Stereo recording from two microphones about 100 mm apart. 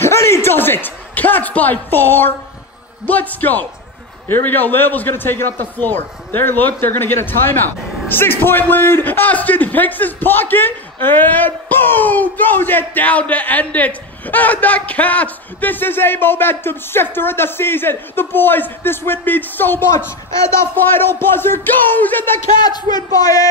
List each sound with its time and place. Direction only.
0.0 s a man's voice: 25° left (ahead or behind)
22.6 s speech: 45° left (ahead or behind)